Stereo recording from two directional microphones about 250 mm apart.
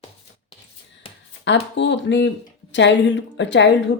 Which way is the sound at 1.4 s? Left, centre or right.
Left.